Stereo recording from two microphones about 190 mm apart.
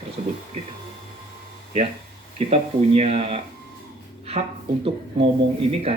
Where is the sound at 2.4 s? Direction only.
35° right (ahead or behind).